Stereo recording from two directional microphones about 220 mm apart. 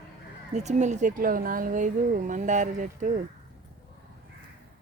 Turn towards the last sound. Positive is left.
turn(degrees=-35)  # may be behind; listen again after turning